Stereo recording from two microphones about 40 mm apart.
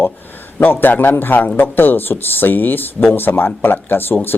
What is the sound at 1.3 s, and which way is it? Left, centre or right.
Speech, left.